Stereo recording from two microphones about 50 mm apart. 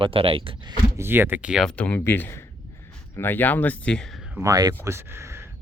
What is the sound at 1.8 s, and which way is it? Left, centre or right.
Speech, left.